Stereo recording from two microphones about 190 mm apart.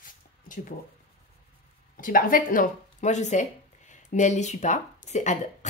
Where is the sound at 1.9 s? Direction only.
45° left (ahead or behind).